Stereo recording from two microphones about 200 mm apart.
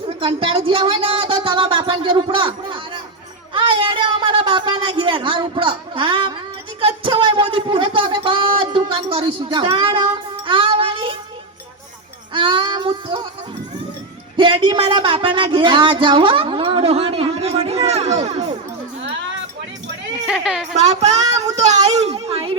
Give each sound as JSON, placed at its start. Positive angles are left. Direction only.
{"t": 0.2, "sound": "a sound", "side_deg": -25}
{"t": 12.3, "sound": "child singing", "side_deg": -25}
{"t": 14.3, "sound": "speech", "side_deg": -25}
{"t": 20.2, "sound": "a woman's voice", "side_deg": 0}
{"t": 20.7, "sound": "a woman's voice", "side_deg": -35}